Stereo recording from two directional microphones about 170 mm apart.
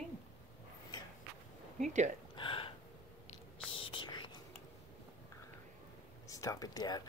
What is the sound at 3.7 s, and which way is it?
Whispering, 30° left (ahead or behind).